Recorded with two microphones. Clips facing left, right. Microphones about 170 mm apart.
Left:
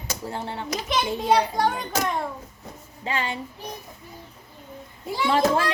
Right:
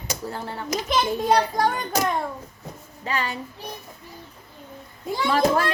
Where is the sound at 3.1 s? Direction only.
20° left (ahead or behind).